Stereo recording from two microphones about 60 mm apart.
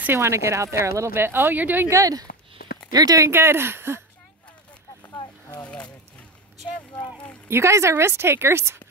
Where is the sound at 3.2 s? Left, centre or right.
Right.